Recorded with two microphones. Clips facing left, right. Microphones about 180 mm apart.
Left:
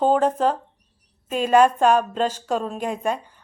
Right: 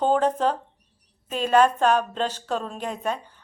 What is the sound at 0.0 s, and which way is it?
A woman's voice, 5° left (ahead or behind).